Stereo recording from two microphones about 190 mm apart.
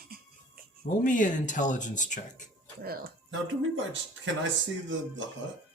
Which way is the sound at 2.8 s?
55° right (ahead or behind).